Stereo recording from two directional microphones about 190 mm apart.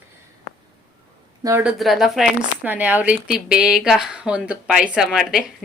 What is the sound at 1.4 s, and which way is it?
Speech, 15° right (ahead or behind).